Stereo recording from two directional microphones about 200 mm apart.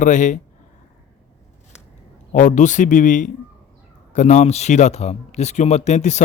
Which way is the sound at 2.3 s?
40° left (ahead or behind).